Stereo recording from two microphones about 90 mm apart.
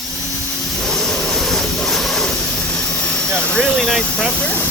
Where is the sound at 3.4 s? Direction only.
10° left (ahead or behind).